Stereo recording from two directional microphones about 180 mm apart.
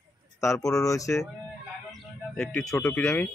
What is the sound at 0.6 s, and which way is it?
Speech, 20° left (ahead or behind).